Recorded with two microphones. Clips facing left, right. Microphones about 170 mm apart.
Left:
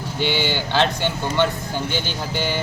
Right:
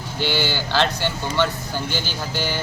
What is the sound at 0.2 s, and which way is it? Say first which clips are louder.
Speech: left 1 dB; 55° left (ahead or behind).